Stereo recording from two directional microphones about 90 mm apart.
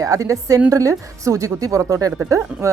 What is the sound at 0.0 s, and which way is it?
A woman's voice, 35° right (ahead or behind).